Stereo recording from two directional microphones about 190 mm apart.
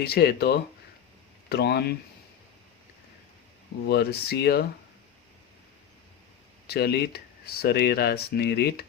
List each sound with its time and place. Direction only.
0.0 s speech: 55° left (ahead or behind)
3.8 s speech: 60° left (ahead or behind)
6.7 s speech: 55° left (ahead or behind)